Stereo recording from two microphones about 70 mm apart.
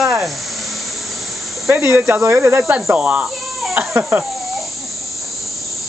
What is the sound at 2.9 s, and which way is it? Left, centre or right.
Speech, centre.